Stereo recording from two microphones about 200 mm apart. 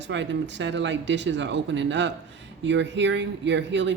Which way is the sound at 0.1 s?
65° right (ahead or behind).